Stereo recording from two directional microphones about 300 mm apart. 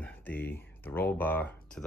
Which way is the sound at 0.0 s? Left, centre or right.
Centre.